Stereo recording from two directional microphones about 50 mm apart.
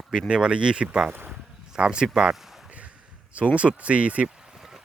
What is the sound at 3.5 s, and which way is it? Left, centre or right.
Speech, right.